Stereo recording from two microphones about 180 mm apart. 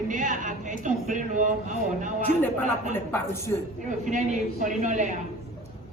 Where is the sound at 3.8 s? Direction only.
45° right (ahead or behind).